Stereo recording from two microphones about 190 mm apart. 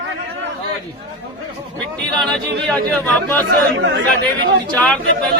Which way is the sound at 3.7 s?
70° right (ahead or behind).